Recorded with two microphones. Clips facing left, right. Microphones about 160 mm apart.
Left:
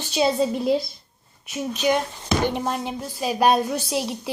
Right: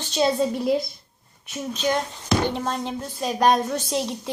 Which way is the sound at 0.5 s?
25° left (ahead or behind).